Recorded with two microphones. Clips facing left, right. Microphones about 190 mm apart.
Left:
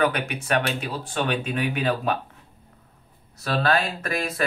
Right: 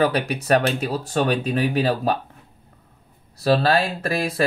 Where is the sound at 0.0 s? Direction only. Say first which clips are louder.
Right 3 dB; 35° right (ahead or behind).